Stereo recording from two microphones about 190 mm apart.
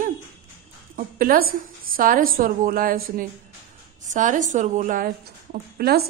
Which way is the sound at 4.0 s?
40° right (ahead or behind).